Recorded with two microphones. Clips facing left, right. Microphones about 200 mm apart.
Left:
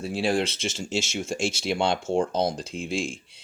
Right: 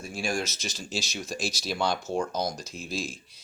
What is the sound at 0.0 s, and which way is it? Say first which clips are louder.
Speech: left 6 dB; 35° left (ahead or behind).